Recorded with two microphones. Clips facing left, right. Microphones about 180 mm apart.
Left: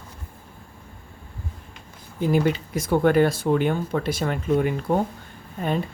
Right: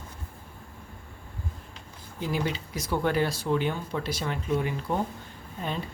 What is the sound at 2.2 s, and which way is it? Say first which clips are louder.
Speech: left 9 dB; 50° left (ahead or behind).